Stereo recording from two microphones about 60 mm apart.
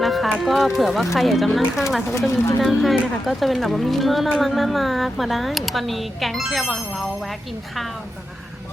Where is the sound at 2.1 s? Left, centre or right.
Left.